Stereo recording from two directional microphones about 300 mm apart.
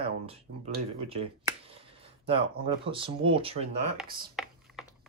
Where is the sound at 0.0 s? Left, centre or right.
Centre.